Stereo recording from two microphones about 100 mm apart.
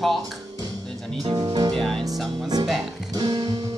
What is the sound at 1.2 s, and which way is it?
Music, 45° right (ahead or behind).